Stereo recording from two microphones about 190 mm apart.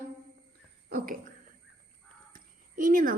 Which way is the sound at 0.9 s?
50° right (ahead or behind).